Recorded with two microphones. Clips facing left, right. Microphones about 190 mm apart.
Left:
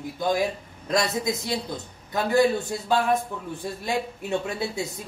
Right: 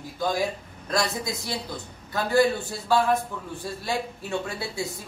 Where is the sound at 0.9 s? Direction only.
20° left (ahead or behind).